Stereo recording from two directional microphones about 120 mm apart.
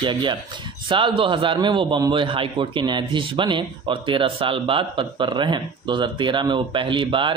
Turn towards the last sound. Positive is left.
turn(degrees=-45)  # may be behind; listen again after turning